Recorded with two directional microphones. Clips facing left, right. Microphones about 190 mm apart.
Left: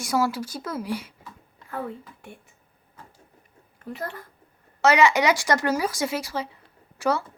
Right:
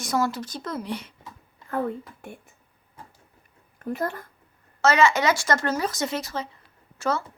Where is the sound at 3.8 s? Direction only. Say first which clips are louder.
Right 5 dB; 50° right (ahead or behind).